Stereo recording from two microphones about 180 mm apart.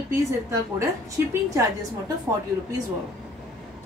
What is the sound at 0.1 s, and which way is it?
Speech, 15° right (ahead or behind).